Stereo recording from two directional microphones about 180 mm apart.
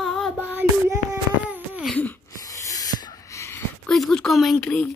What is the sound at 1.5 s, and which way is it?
Wail, 5° right (ahead or behind).